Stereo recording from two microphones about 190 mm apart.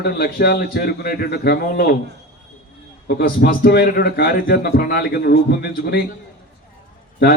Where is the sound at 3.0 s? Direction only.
55° left (ahead or behind).